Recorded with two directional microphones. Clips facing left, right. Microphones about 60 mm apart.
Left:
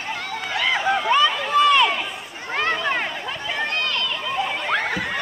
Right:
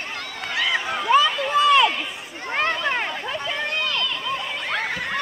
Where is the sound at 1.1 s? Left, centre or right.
Centre.